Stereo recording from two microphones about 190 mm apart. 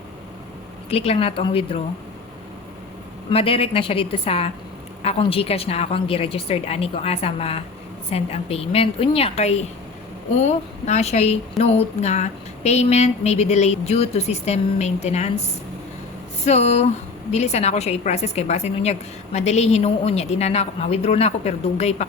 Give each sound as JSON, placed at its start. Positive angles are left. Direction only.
{"t": 0.9, "sound": "speech", "side_deg": 30}
{"t": 3.2, "sound": "speech", "side_deg": 30}
{"t": 16.5, "sound": "speech", "side_deg": 35}